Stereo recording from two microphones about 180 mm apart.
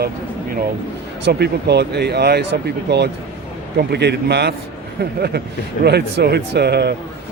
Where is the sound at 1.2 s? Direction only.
65° right (ahead or behind).